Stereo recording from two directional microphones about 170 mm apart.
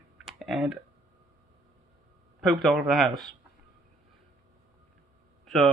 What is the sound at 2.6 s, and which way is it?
Speech, centre (ahead or behind).